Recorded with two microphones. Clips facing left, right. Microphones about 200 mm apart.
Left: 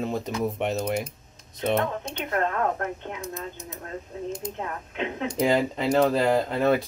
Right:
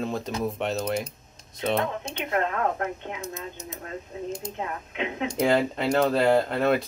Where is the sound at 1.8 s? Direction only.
10° right (ahead or behind).